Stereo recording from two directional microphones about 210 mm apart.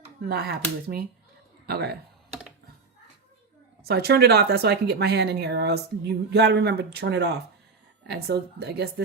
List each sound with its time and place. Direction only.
0.2 s a man's voice: 50° right (ahead or behind)
3.8 s speech: 50° right (ahead or behind)